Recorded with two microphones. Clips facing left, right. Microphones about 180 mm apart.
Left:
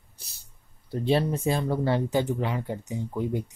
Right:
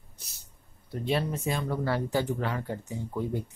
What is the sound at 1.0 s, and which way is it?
Speech, 30° left (ahead or behind).